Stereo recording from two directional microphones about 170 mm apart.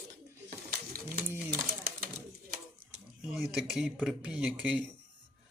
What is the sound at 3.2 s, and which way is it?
Speech, 5° right (ahead or behind).